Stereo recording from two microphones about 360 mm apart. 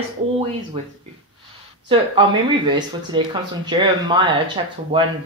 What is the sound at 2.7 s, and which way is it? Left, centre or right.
Speech, centre.